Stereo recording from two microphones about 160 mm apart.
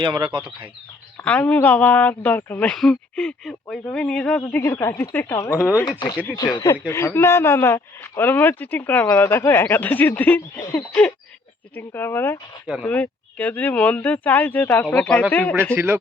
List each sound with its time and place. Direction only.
0.0 s speech: 30° right (ahead or behind)
1.1 s speech: 10° left (ahead or behind)
15.7 s speech: 15° right (ahead or behind)